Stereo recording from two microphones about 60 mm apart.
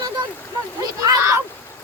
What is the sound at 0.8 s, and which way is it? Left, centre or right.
Speech, right.